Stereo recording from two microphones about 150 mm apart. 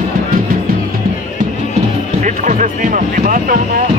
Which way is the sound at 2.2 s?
60° right (ahead or behind).